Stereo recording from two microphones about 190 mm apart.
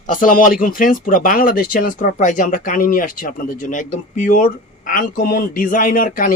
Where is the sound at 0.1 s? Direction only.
45° left (ahead or behind).